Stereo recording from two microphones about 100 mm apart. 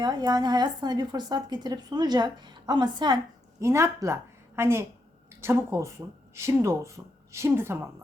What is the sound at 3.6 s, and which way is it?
A woman's voice, 30° right (ahead or behind).